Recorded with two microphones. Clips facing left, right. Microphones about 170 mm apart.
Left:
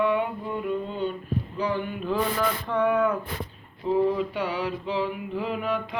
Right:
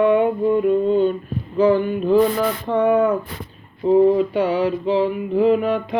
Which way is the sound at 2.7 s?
25° right (ahead or behind).